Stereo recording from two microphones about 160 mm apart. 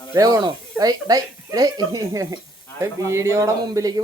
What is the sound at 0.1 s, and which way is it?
Speech, 20° right (ahead or behind).